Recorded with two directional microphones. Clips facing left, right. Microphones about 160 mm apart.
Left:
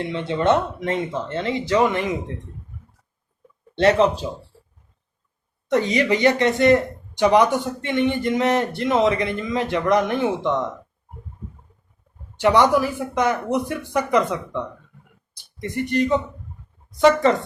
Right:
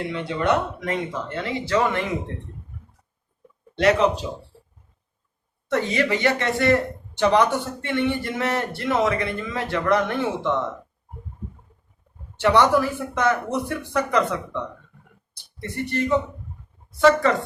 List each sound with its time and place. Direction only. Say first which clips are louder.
0.1 s speech: left 4 dB; 25° left (ahead or behind)
3.8 s speech: left 2 dB; 30° left (ahead or behind)
5.6 s speech: left 3 dB; 15° left (ahead or behind)
12.4 s speech: left 1 dB; 15° left (ahead or behind)